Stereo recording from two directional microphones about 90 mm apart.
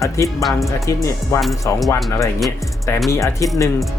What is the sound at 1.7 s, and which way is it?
Speech, 35° left (ahead or behind).